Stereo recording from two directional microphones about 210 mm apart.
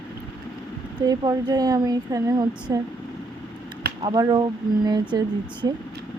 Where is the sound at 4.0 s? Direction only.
20° right (ahead or behind).